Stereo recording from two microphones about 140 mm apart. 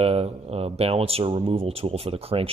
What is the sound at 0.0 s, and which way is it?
Speech, 45° right (ahead or behind).